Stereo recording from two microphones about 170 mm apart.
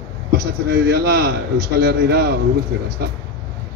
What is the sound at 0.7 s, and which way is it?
A man's voice, 70° right (ahead or behind).